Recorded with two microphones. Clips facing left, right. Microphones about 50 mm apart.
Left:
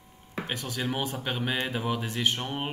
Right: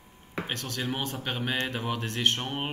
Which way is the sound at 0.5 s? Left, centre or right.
Centre.